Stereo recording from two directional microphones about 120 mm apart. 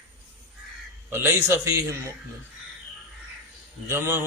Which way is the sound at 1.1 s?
20° right (ahead or behind).